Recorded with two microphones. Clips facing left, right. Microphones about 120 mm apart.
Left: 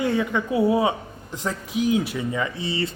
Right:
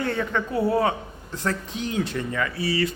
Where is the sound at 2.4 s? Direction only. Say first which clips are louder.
Right 4 dB; 20° left (ahead or behind).